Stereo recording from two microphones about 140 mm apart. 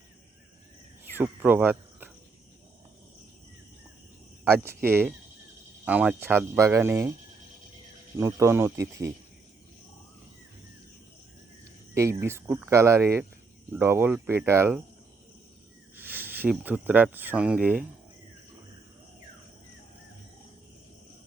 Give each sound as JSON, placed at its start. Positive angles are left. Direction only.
{"t": 1.1, "sound": "speech", "side_deg": -15}
{"t": 4.4, "sound": "speech", "side_deg": -15}
{"t": 8.2, "sound": "speech", "side_deg": -20}
{"t": 11.9, "sound": "speech", "side_deg": -20}
{"t": 16.0, "sound": "speech", "side_deg": -15}